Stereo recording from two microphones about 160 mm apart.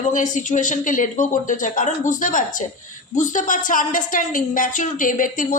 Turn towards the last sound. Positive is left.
turn(degrees=55)  # may be behind; listen again after turning